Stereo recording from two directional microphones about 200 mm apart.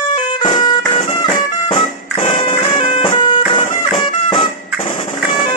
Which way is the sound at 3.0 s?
25° left (ahead or behind).